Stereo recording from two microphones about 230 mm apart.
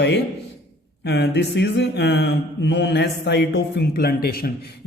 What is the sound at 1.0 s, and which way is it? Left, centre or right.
Mantra, left.